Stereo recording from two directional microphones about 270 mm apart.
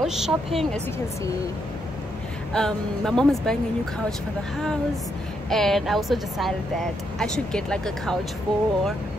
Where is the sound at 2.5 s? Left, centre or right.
Centre.